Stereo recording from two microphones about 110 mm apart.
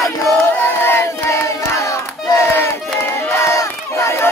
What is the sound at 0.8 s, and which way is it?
Battle cry, 25° left (ahead or behind).